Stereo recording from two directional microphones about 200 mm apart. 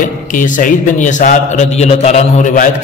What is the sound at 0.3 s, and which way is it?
A man's voice, 40° left (ahead or behind).